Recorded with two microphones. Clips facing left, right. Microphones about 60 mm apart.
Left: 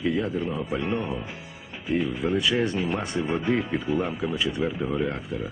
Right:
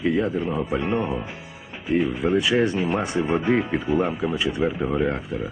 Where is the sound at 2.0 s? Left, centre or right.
Right.